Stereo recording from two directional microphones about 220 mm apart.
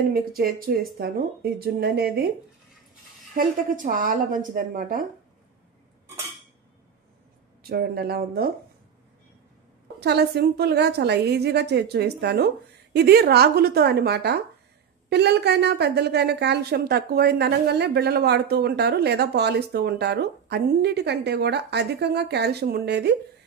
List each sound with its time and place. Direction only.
0.4 s a woman's voice: 45° right (ahead or behind)
3.3 s a woman's voice: 35° right (ahead or behind)
7.6 s a woman's voice: 45° right (ahead or behind)
9.9 s a woman's voice: 50° right (ahead or behind)